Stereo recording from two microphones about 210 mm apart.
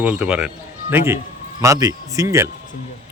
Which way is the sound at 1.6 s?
15° right (ahead or behind).